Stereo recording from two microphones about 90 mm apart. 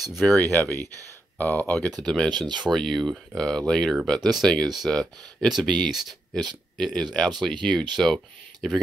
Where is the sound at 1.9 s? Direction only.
5° left (ahead or behind).